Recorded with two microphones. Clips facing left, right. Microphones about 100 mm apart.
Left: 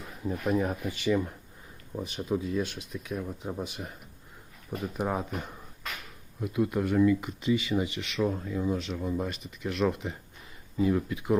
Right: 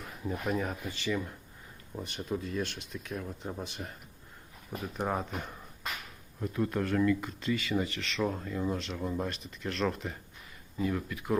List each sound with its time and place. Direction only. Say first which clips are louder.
0.0 s speech: left 3 dB; 5° left (ahead or behind)
2.0 s speech: left 5 dB; 5° left (ahead or behind)
4.9 s speech: left 1 dB; 5° left (ahead or behind); by 11.3 s 20° left (ahead or behind)